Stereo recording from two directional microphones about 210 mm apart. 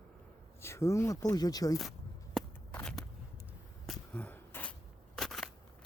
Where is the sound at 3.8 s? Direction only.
5° left (ahead or behind).